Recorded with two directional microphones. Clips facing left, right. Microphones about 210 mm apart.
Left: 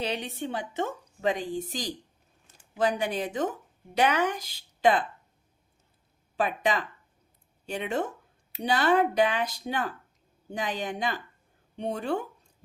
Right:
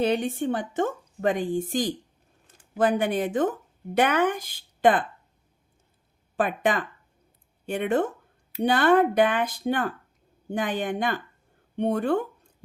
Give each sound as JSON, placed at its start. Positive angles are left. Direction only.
{"t": 0.0, "sound": "a woman's voice", "side_deg": -50}
{"t": 6.3, "sound": "a woman's voice", "side_deg": -50}